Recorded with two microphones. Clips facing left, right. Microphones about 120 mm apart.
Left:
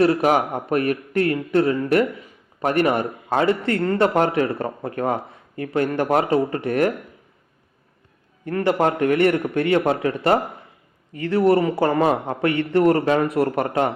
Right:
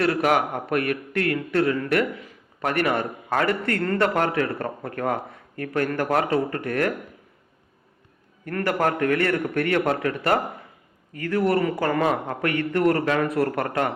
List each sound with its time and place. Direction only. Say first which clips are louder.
0.0 s a man's voice: left 4 dB; 25° left (ahead or behind)
8.4 s a man's voice: left 4 dB; 20° left (ahead or behind)